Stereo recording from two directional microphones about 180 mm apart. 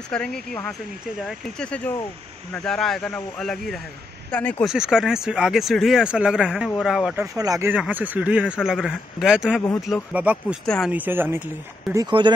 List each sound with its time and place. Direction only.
0.1 s speech: 5° left (ahead or behind)
1.6 s speech: 5° left (ahead or behind)
4.6 s speech: 5° right (ahead or behind)
7.3 s speech: 20° right (ahead or behind)
8.6 s speech: centre (ahead or behind)
10.6 s speech: centre (ahead or behind)
10.9 s speech: 10° right (ahead or behind)
11.9 s speech: 25° right (ahead or behind)